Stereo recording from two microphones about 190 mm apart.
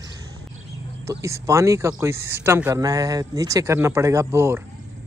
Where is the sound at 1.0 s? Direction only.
15° right (ahead or behind).